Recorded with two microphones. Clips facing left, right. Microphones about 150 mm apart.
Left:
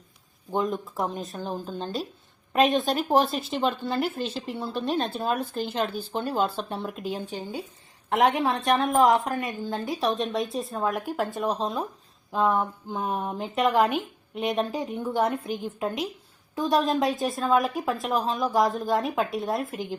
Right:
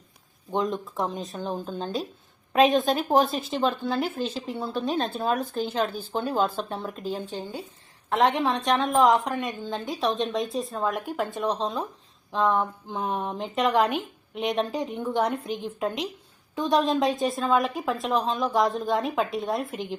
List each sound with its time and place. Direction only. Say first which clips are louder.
0.5 s a woman's voice: even; centre (ahead or behind)